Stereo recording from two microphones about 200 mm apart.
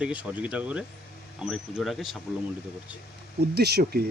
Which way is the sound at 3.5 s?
55° right (ahead or behind).